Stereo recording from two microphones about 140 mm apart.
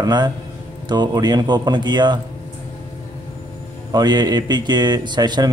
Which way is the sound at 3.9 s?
30° right (ahead or behind).